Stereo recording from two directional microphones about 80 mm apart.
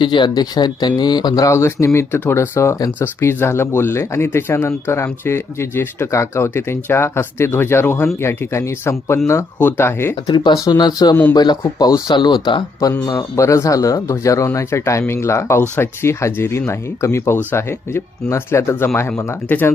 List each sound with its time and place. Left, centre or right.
0.0 s speech: left
1.5 s speech: left
10.2 s speech: left
12.1 s speech: left
13.3 s speech: left